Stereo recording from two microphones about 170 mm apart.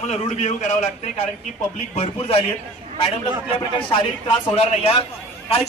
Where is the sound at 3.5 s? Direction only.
30° left (ahead or behind).